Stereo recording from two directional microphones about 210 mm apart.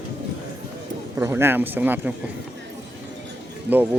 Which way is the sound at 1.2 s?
10° right (ahead or behind).